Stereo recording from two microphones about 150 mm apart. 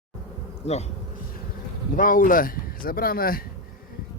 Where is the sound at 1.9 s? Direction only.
65° left (ahead or behind).